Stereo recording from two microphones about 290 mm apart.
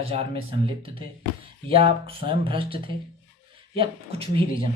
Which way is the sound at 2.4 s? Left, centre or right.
Centre.